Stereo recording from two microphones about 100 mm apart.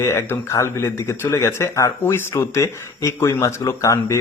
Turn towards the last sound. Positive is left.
turn(degrees=30)  # may be behind; listen again after turning